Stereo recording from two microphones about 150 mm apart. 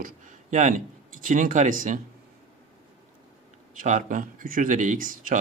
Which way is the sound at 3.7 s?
55° right (ahead or behind).